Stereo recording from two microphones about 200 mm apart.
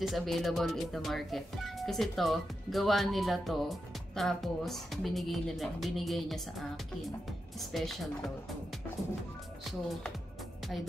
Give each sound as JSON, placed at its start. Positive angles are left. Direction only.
{"t": 0.0, "sound": "speech", "side_deg": 0}